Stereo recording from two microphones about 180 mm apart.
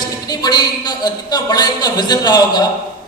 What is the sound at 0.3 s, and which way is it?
A man's voice, 20° left (ahead or behind).